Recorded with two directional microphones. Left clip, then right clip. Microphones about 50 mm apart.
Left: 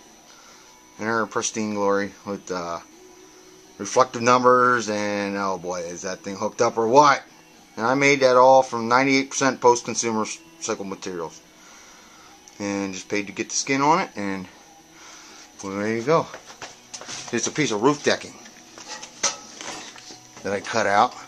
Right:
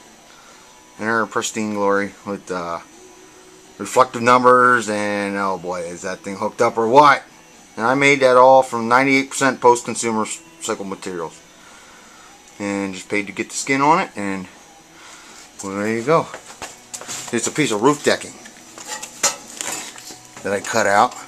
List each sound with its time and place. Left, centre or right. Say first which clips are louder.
1.3 s speech: right 3 dB; left
2.0 s speech: right 3 dB; centre
3.8 s speech: right 4 dB; left
12.5 s speech: right 3 dB; left
15.7 s speech: right 4 dB; left
16.3 s a sound: right 5 dB; centre
17.0 s speech: right 3 dB; centre
19.6 s a sound: right 7 dB; right
20.4 s speech: right 5 dB; centre